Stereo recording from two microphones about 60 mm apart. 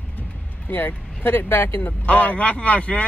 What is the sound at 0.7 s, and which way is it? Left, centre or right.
Speech, left.